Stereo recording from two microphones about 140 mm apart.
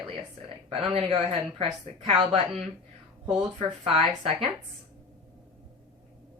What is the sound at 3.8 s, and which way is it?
Speech, 40° right (ahead or behind).